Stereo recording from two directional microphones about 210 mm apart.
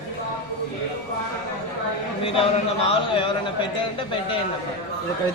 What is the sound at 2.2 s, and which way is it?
Speech, 25° left (ahead or behind).